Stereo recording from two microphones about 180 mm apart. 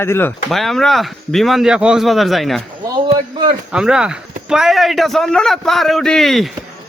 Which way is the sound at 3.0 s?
25° right (ahead or behind).